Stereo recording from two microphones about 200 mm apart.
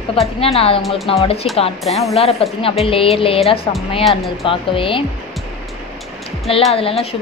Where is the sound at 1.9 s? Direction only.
Centre (ahead or behind).